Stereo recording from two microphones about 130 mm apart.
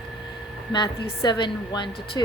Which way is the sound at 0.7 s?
35° left (ahead or behind).